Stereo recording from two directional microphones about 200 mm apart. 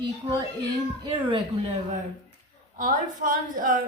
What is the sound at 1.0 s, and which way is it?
Speech, 30° right (ahead or behind).